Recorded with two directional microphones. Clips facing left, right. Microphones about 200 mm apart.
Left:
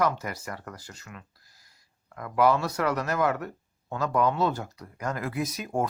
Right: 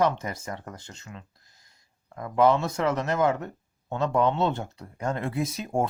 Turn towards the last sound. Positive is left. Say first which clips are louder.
# right 2 dB
turn(degrees=-25)  # may be behind; listen again after turning